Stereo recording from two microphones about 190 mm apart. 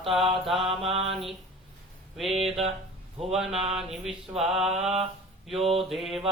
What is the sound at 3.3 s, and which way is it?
Speech, centre (ahead or behind).